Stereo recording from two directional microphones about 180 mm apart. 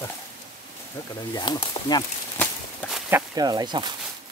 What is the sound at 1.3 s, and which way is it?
Speech, 25° left (ahead or behind).